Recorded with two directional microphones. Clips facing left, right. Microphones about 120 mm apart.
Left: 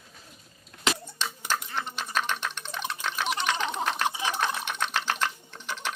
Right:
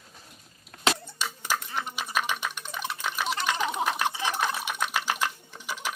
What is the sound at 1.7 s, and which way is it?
Typing, 10° right (ahead or behind).